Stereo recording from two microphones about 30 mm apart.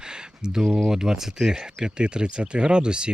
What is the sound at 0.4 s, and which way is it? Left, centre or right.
Speech, right.